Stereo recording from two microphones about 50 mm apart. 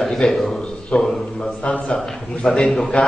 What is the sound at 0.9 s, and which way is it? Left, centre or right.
A man's voice, left.